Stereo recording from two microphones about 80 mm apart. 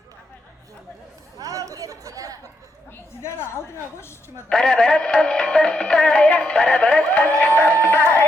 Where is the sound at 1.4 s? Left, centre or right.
Right.